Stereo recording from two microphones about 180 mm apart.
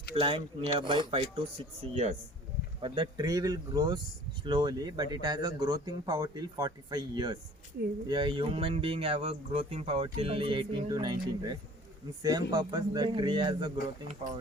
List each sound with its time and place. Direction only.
0.2 s speech: 30° right (ahead or behind)